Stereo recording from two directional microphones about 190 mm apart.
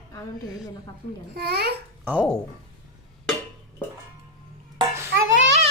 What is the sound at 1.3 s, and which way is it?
Speech, 55° right (ahead or behind).